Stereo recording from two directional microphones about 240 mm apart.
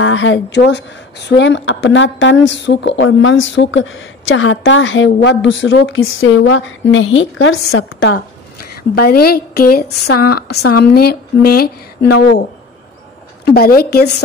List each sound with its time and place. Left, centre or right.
0.0 s a woman's voice: left
8.9 s a woman's voice: left
13.5 s a woman's voice: left